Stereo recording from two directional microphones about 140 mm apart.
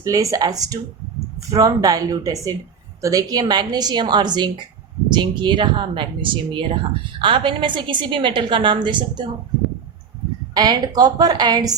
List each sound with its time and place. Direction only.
0.0 s a woman's voice: 25° right (ahead or behind)
10.5 s a woman's voice: 30° right (ahead or behind)